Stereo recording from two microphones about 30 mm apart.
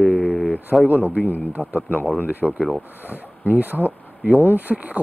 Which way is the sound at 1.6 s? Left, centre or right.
Left.